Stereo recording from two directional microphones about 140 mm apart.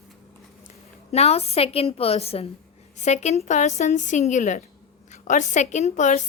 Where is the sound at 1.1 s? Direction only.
50° left (ahead or behind).